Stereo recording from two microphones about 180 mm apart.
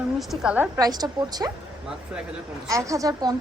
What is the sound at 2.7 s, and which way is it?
Speech, 15° right (ahead or behind).